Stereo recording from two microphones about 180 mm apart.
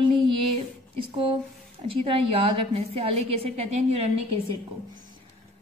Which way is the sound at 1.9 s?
30° right (ahead or behind).